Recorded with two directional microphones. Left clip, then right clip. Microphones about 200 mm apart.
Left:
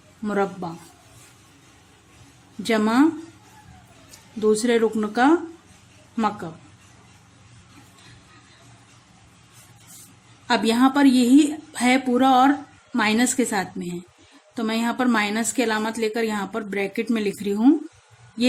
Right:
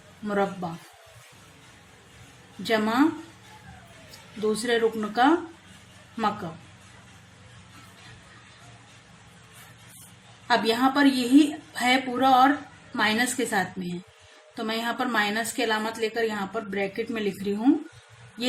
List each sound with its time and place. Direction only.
0.3 s a woman's voice: 25° left (ahead or behind)
2.6 s a woman's voice: 30° left (ahead or behind)
4.4 s a woman's voice: 25° left (ahead or behind)
10.5 s a woman's voice: 30° left (ahead or behind)